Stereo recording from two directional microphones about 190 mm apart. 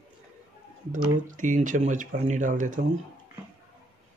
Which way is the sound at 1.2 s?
45° right (ahead or behind).